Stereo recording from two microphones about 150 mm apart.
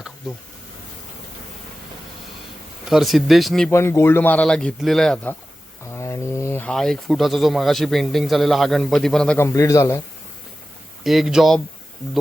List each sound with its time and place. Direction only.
2.9 s a man's voice: centre (ahead or behind)
3.7 s speech: 15° left (ahead or behind)
5.9 s a sound: 20° left (ahead or behind)
6.7 s a man's voice: 5° left (ahead or behind)
9.4 s a man's voice: 20° left (ahead or behind)
11.0 s a man's voice: centre (ahead or behind)